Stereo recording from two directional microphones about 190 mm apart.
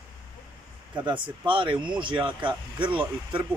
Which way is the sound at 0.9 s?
25° right (ahead or behind).